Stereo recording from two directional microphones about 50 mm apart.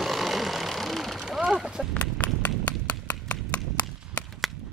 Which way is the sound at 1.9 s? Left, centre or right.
Left.